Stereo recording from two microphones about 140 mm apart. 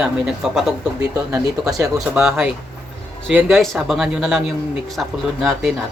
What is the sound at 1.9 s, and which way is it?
A man's voice, centre (ahead or behind).